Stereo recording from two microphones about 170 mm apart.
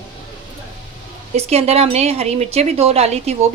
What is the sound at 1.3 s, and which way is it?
Speech, 35° right (ahead or behind).